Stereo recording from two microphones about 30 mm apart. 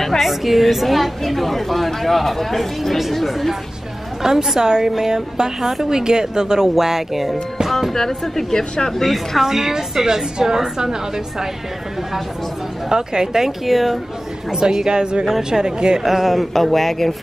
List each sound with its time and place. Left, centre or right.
0.2 s a woman's voice: centre
4.2 s a woman's voice: centre
7.9 s speech: centre
9.4 s a woman's voice: centre
12.9 s a woman's voice: right
13.7 s a woman's voice: centre
14.5 s a woman's voice: centre
16.0 s speech: centre
16.3 s a woman's voice: centre